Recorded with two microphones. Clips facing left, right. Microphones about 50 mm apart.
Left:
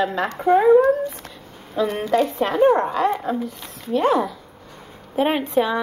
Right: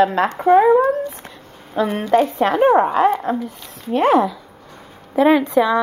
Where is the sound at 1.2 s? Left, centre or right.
Right.